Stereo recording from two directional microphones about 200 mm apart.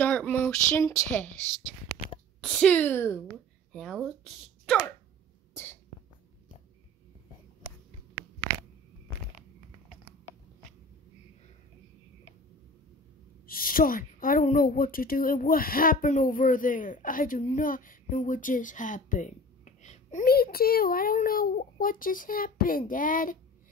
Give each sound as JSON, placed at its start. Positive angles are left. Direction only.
{"t": 0.0, "sound": "speech", "side_deg": 5}
{"t": 2.4, "sound": "speech", "side_deg": 5}
{"t": 5.5, "sound": "sneeze", "side_deg": 10}
{"t": 7.6, "sound": "a sound", "side_deg": -15}
{"t": 13.5, "sound": "a woman's voice", "side_deg": 45}